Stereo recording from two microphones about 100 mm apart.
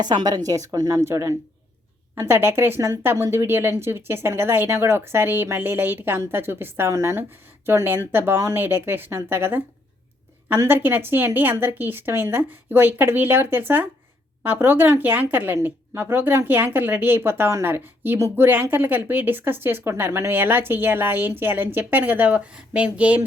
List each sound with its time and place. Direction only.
0.0 s a woman's voice: 45° right (ahead or behind); by 23.2 s 15° right (ahead or behind)